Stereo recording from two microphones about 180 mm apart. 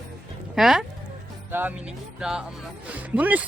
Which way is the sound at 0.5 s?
Centre (ahead or behind).